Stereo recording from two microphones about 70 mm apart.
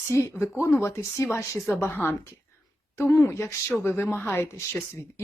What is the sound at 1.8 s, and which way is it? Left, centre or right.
Speech, left.